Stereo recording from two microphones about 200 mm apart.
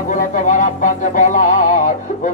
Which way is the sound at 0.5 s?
40° left (ahead or behind).